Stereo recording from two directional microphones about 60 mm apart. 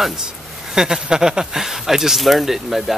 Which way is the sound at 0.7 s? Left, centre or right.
Centre.